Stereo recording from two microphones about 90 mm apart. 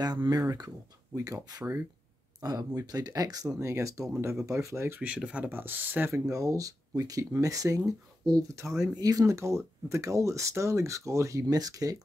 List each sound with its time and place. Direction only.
0.0 s speech: 50° right (ahead or behind)
3.5 s speech: 30° right (ahead or behind)
5.0 s speech: 15° right (ahead or behind)
6.1 s speech: 35° right (ahead or behind)